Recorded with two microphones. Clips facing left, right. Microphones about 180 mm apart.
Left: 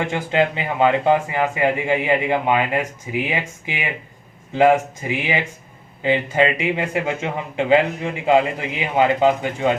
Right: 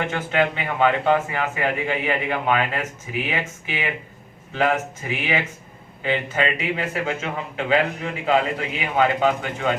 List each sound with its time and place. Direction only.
0.3 s a man's voice: 25° left (ahead or behind)